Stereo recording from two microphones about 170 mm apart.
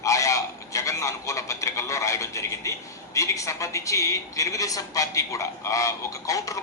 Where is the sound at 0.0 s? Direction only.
20° left (ahead or behind).